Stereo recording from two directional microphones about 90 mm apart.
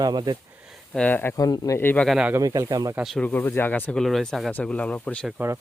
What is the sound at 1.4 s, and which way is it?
Speech, 45° left (ahead or behind).